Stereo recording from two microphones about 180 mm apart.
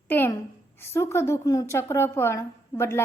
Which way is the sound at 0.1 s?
10° left (ahead or behind).